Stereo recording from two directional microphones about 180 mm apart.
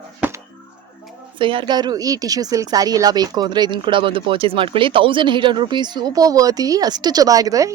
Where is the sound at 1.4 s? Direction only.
25° right (ahead or behind).